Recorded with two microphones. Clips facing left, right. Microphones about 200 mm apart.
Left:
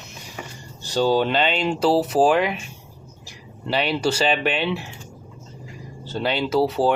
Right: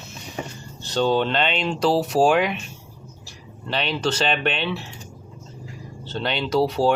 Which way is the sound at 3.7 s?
10° left (ahead or behind).